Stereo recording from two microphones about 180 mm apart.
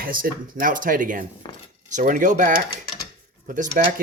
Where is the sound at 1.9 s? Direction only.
45° right (ahead or behind).